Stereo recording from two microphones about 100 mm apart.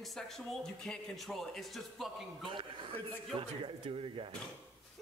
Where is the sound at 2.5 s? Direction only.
60° right (ahead or behind).